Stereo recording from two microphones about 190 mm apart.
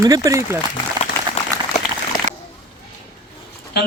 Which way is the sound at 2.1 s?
50° left (ahead or behind).